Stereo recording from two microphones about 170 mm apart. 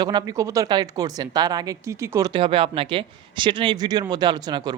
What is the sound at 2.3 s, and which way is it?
Speech, 30° right (ahead or behind).